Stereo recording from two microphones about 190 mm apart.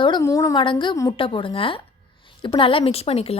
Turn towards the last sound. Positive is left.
turn(degrees=30)  # may be behind; listen again after turning